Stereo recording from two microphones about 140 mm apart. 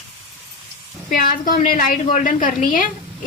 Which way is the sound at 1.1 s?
75° left (ahead or behind).